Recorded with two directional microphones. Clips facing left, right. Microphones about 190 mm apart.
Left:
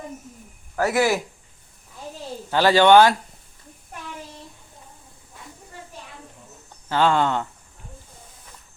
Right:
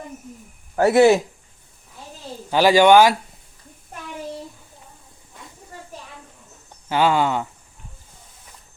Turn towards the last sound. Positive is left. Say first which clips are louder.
# right 1 dB
turn(degrees=-5)  # may be behind; listen again after turning